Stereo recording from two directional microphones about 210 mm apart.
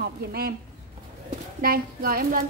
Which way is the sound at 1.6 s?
45° right (ahead or behind).